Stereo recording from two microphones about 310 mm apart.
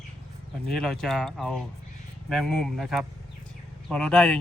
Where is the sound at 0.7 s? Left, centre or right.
Centre.